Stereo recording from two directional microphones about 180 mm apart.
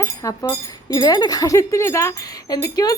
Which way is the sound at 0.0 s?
20° left (ahead or behind).